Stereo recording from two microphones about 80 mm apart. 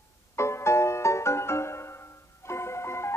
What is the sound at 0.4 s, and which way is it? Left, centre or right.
Music, left.